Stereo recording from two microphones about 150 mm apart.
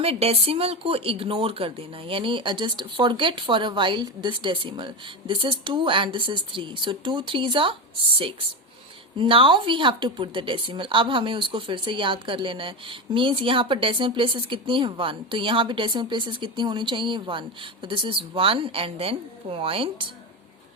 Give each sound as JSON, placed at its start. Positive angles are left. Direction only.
{"t": 0.0, "sound": "speech", "side_deg": -40}
{"t": 9.1, "sound": "speech", "side_deg": -35}